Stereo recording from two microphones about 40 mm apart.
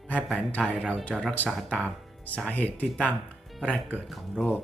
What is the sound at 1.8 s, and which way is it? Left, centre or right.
Speech, left.